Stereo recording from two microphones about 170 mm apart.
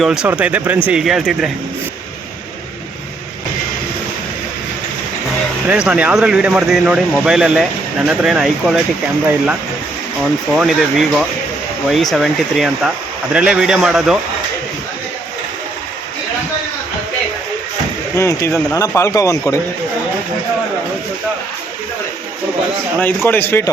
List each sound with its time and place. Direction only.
0.0 s speech: 5° right (ahead or behind)
5.6 s speech: 5° right (ahead or behind)
10.5 s speech: centre (ahead or behind)
18.2 s speech: 15° left (ahead or behind)
23.0 s speech: 10° left (ahead or behind)